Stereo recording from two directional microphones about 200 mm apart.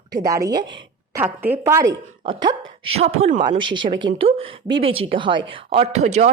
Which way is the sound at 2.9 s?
30° right (ahead or behind).